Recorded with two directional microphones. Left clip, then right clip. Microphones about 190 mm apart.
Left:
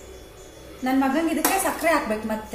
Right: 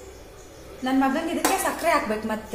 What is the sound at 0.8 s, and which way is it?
Speech, 15° right (ahead or behind).